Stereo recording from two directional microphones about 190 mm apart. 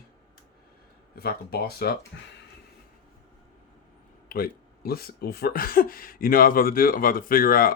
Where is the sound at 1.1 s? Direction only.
55° left (ahead or behind).